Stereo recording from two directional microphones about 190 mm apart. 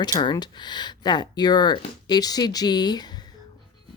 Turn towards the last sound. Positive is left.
turn(degrees=20)  # may be behind; listen again after turning